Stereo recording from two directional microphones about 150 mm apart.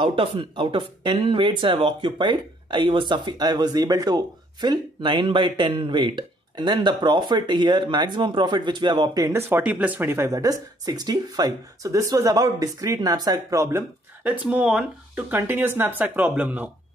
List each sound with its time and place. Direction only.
0.0 s speech: 35° right (ahead or behind); by 16.7 s 10° right (ahead or behind)